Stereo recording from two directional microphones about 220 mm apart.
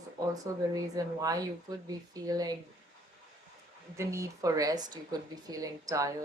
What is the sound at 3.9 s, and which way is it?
Speech, 15° right (ahead or behind).